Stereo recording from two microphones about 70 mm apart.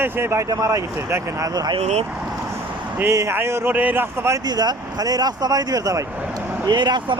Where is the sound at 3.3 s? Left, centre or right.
Right.